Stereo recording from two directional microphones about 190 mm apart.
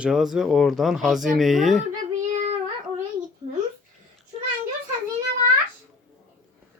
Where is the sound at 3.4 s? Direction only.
35° right (ahead or behind).